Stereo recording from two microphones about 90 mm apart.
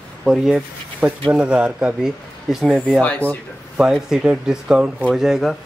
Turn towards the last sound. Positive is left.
turn(degrees=-5)  # may be behind; listen again after turning